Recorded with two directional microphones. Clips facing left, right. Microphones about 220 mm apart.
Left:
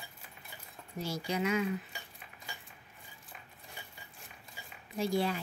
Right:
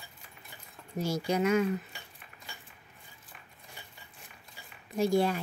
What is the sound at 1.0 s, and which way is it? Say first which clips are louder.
Speech: right 5 dB; 45° right (ahead or behind).